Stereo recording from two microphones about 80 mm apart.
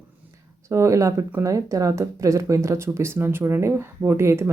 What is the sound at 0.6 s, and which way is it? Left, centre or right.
Speech, right.